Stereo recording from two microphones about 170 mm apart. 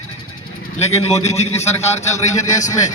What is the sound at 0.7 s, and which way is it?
A man's voice, 40° left (ahead or behind).